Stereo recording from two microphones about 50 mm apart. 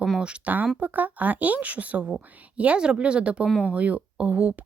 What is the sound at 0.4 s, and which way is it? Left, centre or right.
Speech, right.